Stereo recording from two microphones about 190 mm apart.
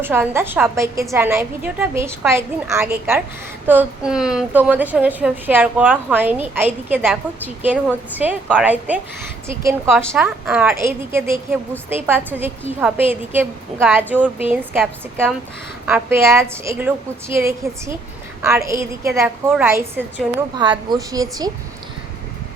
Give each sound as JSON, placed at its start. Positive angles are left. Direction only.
{"t": 0.0, "sound": "a woman's voice", "side_deg": -10}
{"t": 10.1, "sound": "a woman's voice", "side_deg": -10}
{"t": 20.6, "sound": "a woman's voice", "side_deg": -20}